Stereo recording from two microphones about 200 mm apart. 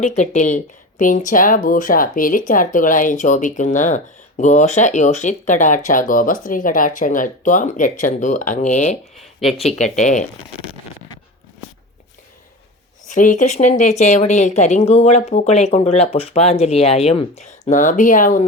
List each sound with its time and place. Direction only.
0.2 s speech: 40° left (ahead or behind)
9.1 s speech: centre (ahead or behind)
9.6 s speech: 35° left (ahead or behind)
13.1 s speech: 40° left (ahead or behind)